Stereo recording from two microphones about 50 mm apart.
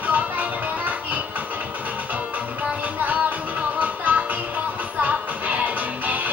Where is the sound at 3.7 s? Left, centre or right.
Right.